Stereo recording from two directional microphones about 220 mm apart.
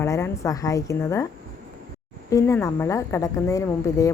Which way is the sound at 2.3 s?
15° left (ahead or behind).